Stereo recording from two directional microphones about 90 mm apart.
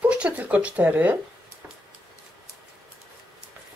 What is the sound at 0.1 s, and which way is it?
Speech, 15° right (ahead or behind).